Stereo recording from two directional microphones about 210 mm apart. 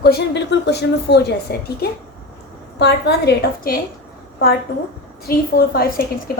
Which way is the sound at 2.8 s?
55° left (ahead or behind).